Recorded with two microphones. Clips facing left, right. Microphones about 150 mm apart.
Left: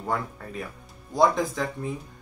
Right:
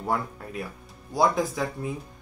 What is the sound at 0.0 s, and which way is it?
Speech, 10° right (ahead or behind).